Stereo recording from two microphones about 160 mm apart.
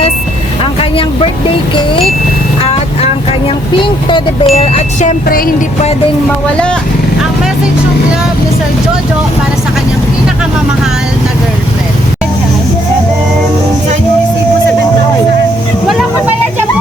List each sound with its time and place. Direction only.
0.6 s vehicle: 35° left (ahead or behind)
2.6 s speech: 35° left (ahead or behind)
5.3 s music: 65° left (ahead or behind)